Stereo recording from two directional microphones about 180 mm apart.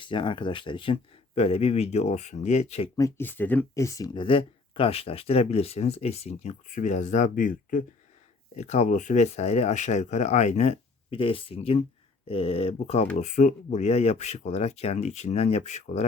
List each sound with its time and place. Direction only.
0.0 s speech: 25° left (ahead or behind)
2.9 s speech: 15° left (ahead or behind); by 7.9 s 50° left (ahead or behind)
8.5 s speech: 40° left (ahead or behind)